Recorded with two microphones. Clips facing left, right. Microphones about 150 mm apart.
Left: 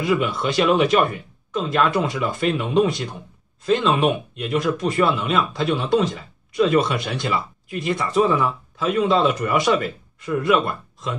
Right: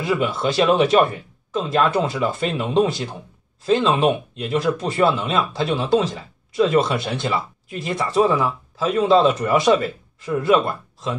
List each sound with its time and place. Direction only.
0.0 s speech: 30° right (ahead or behind)